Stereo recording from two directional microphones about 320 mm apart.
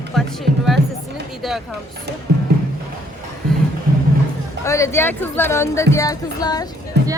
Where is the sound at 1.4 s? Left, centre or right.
Centre.